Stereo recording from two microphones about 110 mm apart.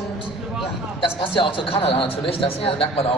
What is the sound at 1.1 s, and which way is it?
Speech, 50° left (ahead or behind).